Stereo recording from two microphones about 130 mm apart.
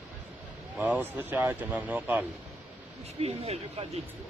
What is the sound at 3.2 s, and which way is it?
Speech, 50° right (ahead or behind).